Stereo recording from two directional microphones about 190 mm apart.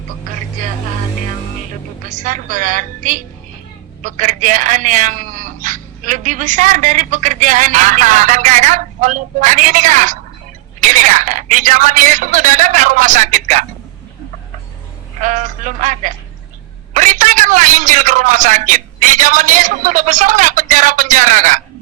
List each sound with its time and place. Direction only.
2.0 s a man's voice: 40° right (ahead or behind)
15.2 s a man's voice: 40° right (ahead or behind)